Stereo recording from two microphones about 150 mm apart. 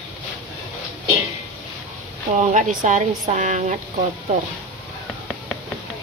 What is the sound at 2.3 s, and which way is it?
Speech, 55° right (ahead or behind).